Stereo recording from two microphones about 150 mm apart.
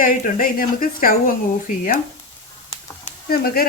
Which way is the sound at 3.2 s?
85° left.